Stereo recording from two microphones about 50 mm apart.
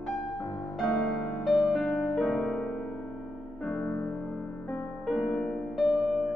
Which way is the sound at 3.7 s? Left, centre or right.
Left.